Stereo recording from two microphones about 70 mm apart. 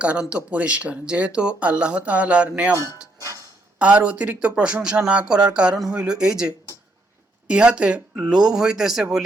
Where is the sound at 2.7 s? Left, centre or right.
Left.